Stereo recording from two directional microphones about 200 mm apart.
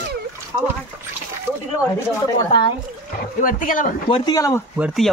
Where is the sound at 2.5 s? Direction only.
25° left (ahead or behind).